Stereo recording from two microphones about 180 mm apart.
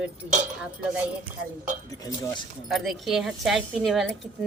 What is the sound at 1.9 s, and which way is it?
Speech, 20° left (ahead or behind).